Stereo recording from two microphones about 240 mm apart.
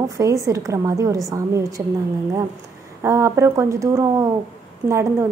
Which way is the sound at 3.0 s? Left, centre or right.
Centre.